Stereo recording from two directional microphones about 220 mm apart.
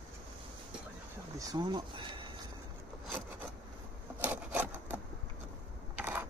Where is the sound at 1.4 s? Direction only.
15° right (ahead or behind).